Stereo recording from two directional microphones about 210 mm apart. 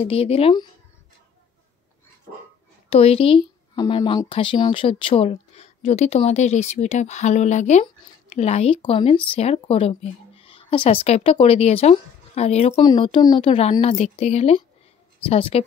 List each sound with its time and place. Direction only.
0.0 s a woman's voice: 25° left (ahead or behind)
2.9 s a woman's voice: 30° left (ahead or behind)